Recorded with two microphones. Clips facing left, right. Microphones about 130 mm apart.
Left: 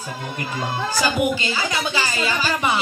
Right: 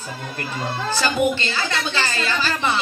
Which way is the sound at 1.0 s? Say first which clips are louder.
Right 1 dB; 10° left (ahead or behind).